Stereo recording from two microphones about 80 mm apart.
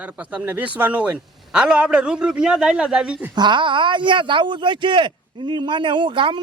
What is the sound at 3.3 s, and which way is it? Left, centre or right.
Speech, right.